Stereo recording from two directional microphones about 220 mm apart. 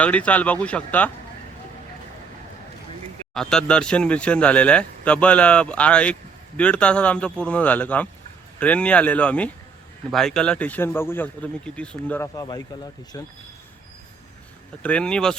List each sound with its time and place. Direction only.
0.0 s a man's voice: 5° left (ahead or behind)
3.3 s a man's voice: 5° left (ahead or behind)
14.8 s speech: 5° left (ahead or behind)